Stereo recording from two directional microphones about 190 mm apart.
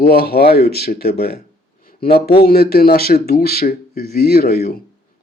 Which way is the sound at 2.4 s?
55° left (ahead or behind).